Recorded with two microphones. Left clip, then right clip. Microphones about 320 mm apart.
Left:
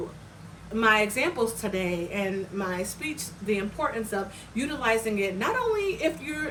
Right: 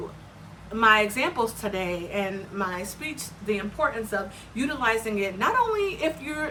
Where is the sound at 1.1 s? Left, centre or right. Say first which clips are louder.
Right 1 dB; centre.